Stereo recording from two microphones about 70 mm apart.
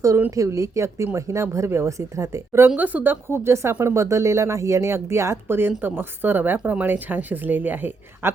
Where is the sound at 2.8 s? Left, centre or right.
Right.